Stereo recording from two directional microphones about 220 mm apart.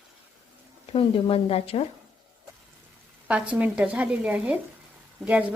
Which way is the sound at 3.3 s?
5° right (ahead or behind).